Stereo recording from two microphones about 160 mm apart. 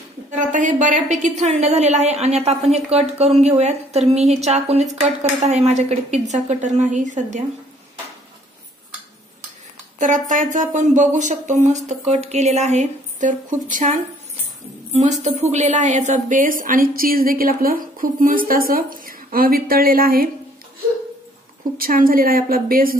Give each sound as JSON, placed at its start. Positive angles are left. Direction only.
{"t": 0.3, "sound": "a woman's voice", "side_deg": -50}
{"t": 9.9, "sound": "a woman's voice", "side_deg": -50}
{"t": 21.7, "sound": "a woman's voice", "side_deg": -65}